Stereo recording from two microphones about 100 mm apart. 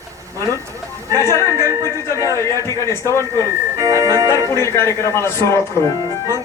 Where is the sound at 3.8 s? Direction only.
35° right (ahead or behind).